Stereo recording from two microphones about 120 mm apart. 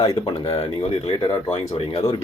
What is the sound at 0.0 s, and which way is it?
Speech, 35° left (ahead or behind).